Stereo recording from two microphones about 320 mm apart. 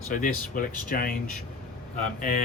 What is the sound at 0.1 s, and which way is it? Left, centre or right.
Speech, left.